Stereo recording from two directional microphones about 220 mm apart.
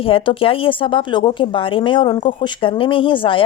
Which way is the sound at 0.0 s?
25° left (ahead or behind).